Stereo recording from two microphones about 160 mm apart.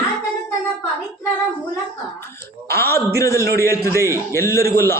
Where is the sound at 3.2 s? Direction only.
20° left (ahead or behind).